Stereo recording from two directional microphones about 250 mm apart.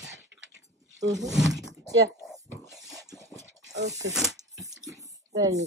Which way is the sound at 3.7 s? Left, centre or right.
Right.